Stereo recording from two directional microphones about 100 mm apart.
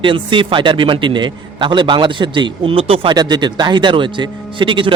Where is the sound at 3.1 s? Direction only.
45° right (ahead or behind).